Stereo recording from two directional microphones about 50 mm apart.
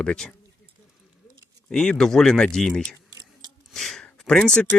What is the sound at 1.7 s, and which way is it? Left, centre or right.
Speech, centre.